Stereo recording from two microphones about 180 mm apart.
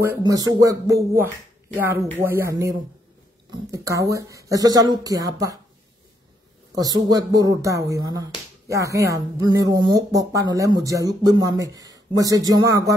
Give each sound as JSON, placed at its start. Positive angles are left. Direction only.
{"t": 0.0, "sound": "a woman's voice", "side_deg": -15}
{"t": 6.7, "sound": "a woman's voice", "side_deg": -20}